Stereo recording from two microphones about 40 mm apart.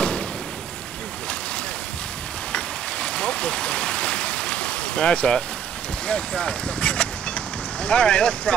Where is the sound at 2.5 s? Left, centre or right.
Left.